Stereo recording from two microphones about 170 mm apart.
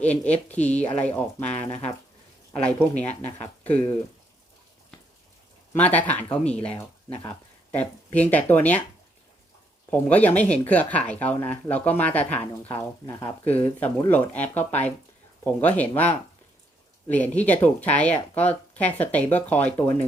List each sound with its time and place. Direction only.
0.0 s speech: 10° left (ahead or behind)
5.7 s speech: 10° left (ahead or behind)
9.9 s speech: 10° left (ahead or behind)
17.1 s speech: 10° left (ahead or behind)